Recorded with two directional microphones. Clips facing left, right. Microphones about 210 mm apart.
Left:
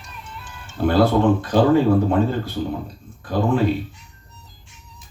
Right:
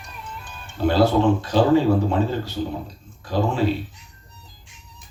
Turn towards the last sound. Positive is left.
turn(degrees=55)  # may be behind; listen again after turning